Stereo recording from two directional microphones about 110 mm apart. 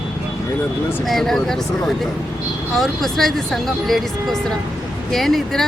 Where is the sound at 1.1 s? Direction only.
5° left (ahead or behind).